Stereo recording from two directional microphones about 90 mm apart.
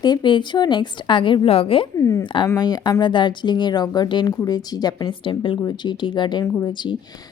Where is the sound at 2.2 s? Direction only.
65° left (ahead or behind).